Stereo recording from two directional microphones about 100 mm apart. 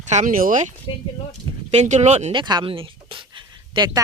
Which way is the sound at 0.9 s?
50° left (ahead or behind).